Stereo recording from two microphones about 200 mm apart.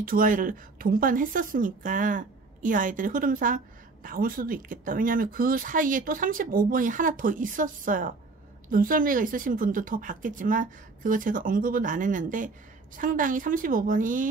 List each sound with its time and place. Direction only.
0.0 s a woman's voice: 45° right (ahead or behind)